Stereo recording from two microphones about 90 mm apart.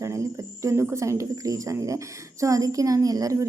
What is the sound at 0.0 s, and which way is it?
A woman's voice, 35° right (ahead or behind).